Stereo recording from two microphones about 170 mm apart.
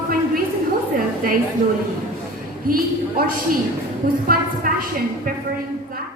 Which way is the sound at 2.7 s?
60° right (ahead or behind).